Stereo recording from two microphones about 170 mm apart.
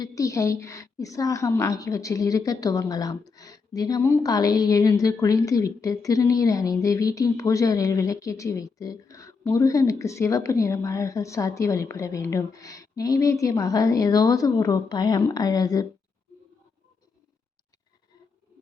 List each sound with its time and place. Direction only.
0.0 s a woman's voice: 20° left (ahead or behind)